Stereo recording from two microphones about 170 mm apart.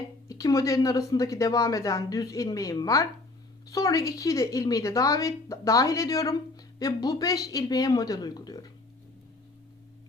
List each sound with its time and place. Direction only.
0.3 s a woman's voice: 20° left (ahead or behind)